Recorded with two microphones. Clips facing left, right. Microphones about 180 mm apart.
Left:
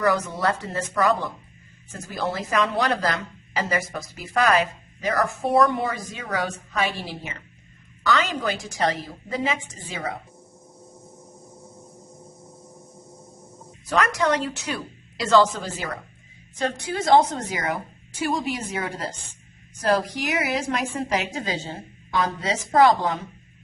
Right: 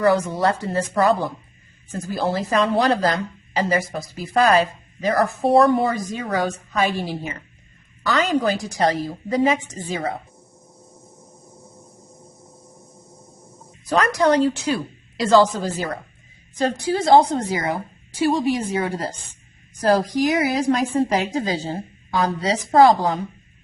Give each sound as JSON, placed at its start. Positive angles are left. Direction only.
{"t": 0.0, "sound": "a woman's voice", "side_deg": -30}
{"t": 8.0, "sound": "a woman's voice", "side_deg": -35}
{"t": 13.9, "sound": "a woman's voice", "side_deg": -35}